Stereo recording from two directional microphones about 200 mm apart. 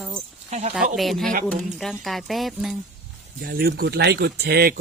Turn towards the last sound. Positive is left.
turn(degrees=-50)  # may be behind; listen again after turning